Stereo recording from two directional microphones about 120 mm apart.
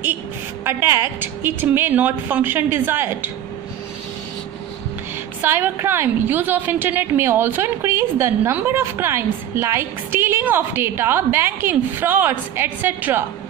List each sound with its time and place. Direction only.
0.7 s a woman's voice: 20° right (ahead or behind)
5.4 s a woman's voice: 20° right (ahead or behind)